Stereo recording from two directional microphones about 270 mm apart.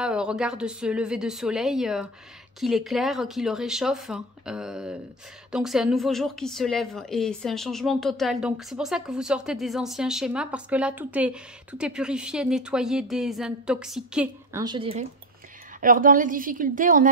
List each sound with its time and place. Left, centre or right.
0.0 s a woman's voice: centre; by 15.0 s right
15.8 s a woman's voice: right